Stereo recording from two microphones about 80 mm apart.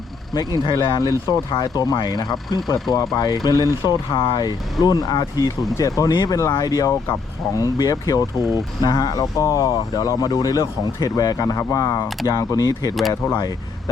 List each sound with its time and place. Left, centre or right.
0.6 s speech: left
3.2 s speech: left
3.8 s speech: left
5.7 s speech: left